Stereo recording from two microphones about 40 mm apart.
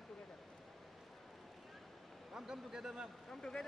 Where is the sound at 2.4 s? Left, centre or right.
Centre.